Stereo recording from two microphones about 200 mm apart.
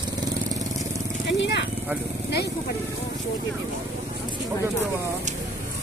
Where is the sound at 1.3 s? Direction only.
60° left (ahead or behind).